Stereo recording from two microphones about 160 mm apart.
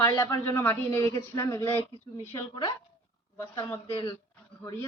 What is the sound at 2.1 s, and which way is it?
A woman's voice, 25° left (ahead or behind).